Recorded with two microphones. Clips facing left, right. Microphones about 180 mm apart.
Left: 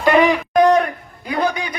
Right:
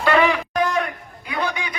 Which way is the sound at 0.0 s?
15° left (ahead or behind).